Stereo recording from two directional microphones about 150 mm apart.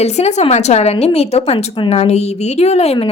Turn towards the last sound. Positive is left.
turn(degrees=45)  # may be behind; listen again after turning